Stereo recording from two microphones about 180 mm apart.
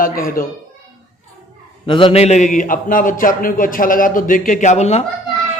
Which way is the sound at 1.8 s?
30° left (ahead or behind).